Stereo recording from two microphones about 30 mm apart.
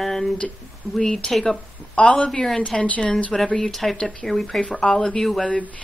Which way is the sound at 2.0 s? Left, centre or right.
Left.